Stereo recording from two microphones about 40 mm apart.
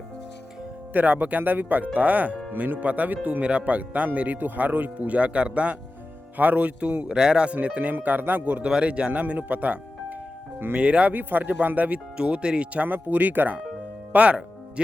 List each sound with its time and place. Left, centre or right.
0.9 s speech: right
6.3 s speech: right
7.2 s speech: right
7.5 s speech: right
8.2 s speech: right
8.6 s speech: right
10.8 s speech: right
11.1 s speech: right
12.1 s speech: right
12.7 s speech: right
14.1 s speech: right